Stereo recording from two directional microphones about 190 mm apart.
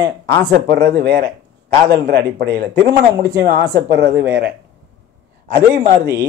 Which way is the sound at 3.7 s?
60° right (ahead or behind).